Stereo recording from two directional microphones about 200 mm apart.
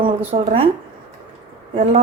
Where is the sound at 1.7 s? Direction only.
35° right (ahead or behind).